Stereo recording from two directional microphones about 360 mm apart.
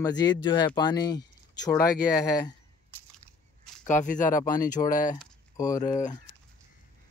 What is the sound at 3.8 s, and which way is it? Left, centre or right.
Speech, left.